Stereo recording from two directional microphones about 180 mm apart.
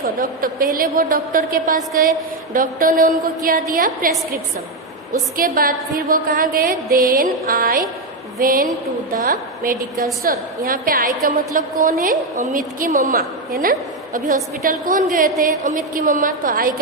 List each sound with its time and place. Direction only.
0.0 s a woman's voice: 55° right (ahead or behind)
5.4 s a woman's voice: 55° right (ahead or behind)